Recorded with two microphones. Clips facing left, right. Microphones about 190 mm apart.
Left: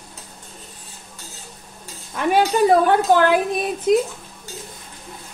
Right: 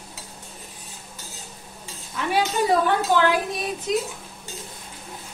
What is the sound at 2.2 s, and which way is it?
Speech, 50° left (ahead or behind).